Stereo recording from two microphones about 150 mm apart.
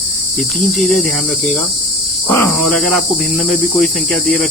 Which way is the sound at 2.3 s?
20° left (ahead or behind).